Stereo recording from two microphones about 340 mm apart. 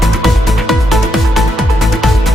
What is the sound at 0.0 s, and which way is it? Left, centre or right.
Music, centre.